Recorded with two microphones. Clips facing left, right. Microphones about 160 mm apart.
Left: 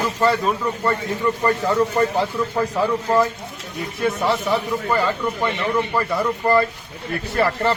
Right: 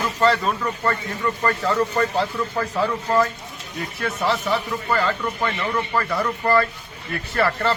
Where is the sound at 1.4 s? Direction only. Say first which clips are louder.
Left 2 dB; 15° left (ahead or behind).